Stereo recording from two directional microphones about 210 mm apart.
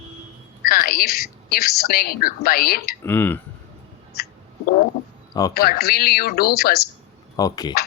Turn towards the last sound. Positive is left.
turn(degrees=15)  # may be behind; listen again after turning